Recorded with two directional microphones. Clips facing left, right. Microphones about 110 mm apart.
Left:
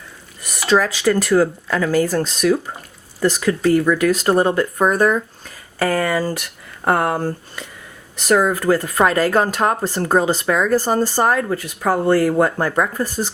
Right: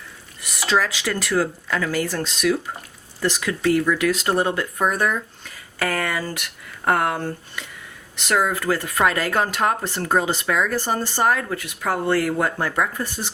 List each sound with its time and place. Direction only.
0.4 s speech: 40° left (ahead or behind)